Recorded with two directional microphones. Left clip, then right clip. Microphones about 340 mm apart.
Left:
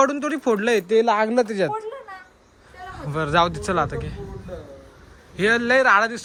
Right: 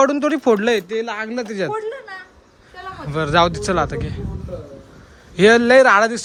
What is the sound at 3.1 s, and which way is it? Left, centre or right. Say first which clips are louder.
A man's voice: right 4 dB; centre.